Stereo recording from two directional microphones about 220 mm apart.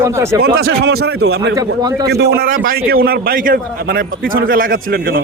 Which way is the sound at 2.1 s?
45° right (ahead or behind).